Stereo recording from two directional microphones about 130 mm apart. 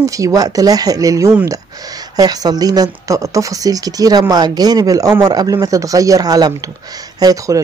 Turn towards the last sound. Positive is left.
turn(degrees=-25)  # may be behind; listen again after turning